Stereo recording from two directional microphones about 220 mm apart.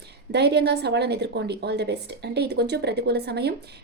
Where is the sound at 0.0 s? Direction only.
50° right (ahead or behind).